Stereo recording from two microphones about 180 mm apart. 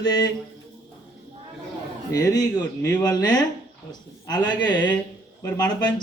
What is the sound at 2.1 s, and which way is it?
Speech, 20° left (ahead or behind).